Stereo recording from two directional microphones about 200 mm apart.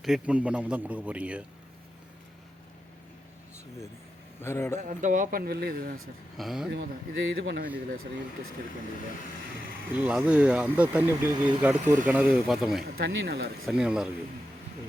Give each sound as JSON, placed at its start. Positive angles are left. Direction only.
{"t": 0.0, "sound": "speech", "side_deg": -5}
{"t": 4.4, "sound": "a man's voice", "side_deg": 15}
{"t": 4.8, "sound": "speech", "side_deg": -40}
{"t": 6.3, "sound": "speech", "side_deg": 0}
{"t": 6.7, "sound": "speech", "side_deg": -60}
{"t": 9.9, "sound": "speech", "side_deg": -5}
{"t": 12.8, "sound": "speech", "side_deg": -50}
{"t": 13.7, "sound": "speech", "side_deg": -5}